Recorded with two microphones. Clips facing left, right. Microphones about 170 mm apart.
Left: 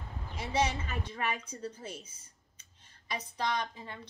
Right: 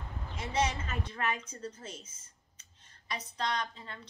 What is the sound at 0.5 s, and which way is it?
A woman's voice, 15° left (ahead or behind).